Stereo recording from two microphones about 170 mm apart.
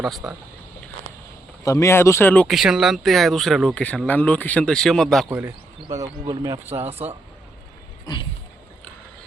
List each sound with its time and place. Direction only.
0.2 s speech: 5° right (ahead or behind)
1.6 s speech: 20° left (ahead or behind)
2.6 s speech: centre (ahead or behind)
5.3 s speech: 10° right (ahead or behind)
6.8 s speech: 40° right (ahead or behind)
8.0 s a sound: 30° left (ahead or behind)